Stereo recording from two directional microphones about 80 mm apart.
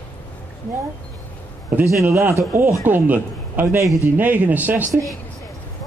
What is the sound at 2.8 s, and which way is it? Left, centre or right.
A man's voice, right.